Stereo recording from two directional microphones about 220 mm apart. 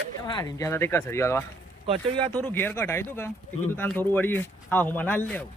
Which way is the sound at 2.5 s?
10° left (ahead or behind).